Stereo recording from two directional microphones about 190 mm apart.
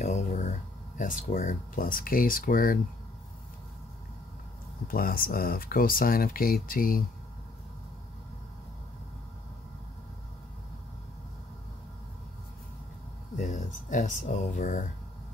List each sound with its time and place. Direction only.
0.0 s speech: 40° left (ahead or behind)
4.8 s speech: 50° left (ahead or behind)
13.5 s speech: 40° left (ahead or behind)